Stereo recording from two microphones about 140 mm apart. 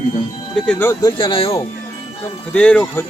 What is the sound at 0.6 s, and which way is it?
Speech, 15° left (ahead or behind).